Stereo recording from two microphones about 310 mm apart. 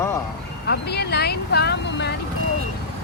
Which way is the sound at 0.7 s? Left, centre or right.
Left.